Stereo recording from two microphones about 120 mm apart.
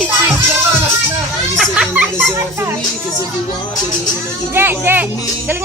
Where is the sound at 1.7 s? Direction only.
10° right (ahead or behind).